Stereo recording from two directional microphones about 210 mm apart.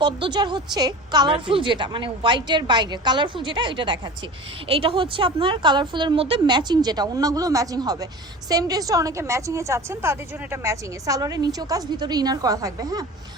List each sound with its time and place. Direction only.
0.0 s a woman's voice: 20° right (ahead or behind)